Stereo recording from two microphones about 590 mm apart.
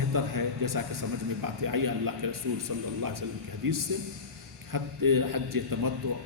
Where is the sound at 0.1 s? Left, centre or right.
Right.